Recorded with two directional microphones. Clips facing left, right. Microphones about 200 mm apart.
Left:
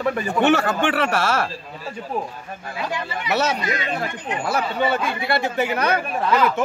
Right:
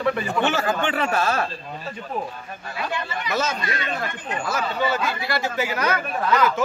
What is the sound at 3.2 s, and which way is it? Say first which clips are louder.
Speech: left 4 dB; 70° left (ahead or behind).